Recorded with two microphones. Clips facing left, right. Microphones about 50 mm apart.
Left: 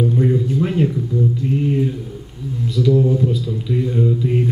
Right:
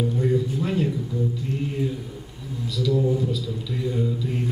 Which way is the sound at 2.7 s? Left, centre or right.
Left.